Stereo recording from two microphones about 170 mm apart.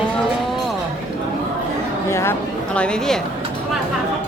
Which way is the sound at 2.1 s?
15° left (ahead or behind).